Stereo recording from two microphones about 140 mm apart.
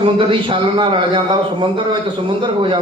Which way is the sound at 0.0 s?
40° right (ahead or behind).